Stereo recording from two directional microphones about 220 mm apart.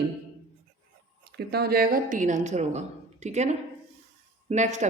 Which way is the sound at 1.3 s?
45° right (ahead or behind).